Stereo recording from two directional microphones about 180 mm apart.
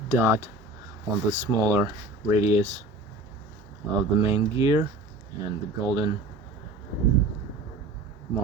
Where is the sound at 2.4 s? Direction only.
40° left (ahead or behind).